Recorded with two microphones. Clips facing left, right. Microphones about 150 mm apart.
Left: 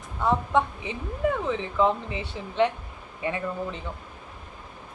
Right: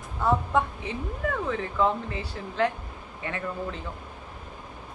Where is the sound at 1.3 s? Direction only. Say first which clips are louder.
Left 2 dB; 15° left (ahead or behind).